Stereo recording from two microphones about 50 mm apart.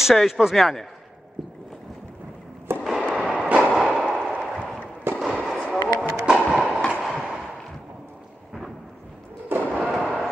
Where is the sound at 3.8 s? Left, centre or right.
Centre.